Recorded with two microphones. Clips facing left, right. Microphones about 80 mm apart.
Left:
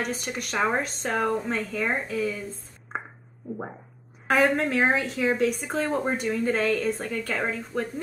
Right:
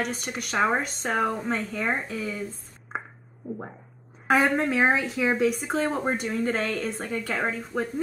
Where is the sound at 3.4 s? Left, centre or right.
Centre.